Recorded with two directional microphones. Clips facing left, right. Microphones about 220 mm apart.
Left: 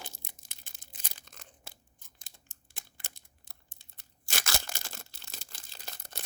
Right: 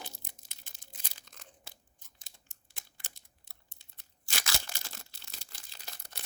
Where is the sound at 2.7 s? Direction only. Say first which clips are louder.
Left 2 dB; 50° left (ahead or behind).